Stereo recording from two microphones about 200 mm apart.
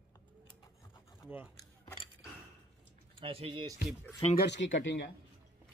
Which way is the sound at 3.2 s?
25° right (ahead or behind).